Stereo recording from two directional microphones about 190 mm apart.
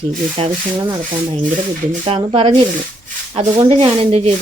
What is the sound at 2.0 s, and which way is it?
Speech, 30° right (ahead or behind).